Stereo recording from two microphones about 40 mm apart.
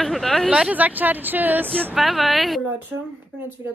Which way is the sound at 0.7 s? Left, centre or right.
Right.